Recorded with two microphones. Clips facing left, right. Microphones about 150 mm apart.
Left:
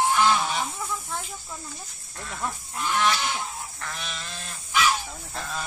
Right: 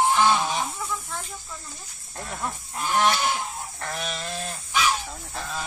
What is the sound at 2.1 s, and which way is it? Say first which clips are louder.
Goose: right 1 dB; 40° right (ahead or behind).